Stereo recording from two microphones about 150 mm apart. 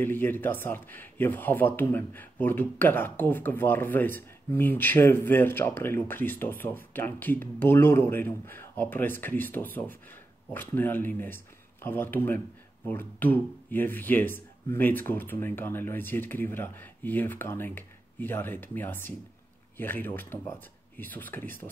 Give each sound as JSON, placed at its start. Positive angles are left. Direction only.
{"t": 0.0, "sound": "a man's voice", "side_deg": 15}